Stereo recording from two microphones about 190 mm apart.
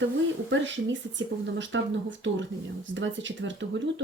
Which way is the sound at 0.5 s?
75° right (ahead or behind).